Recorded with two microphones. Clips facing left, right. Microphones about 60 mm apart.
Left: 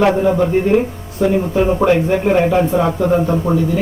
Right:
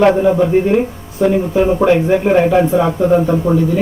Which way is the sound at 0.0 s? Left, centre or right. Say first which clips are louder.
Right 2 dB; centre.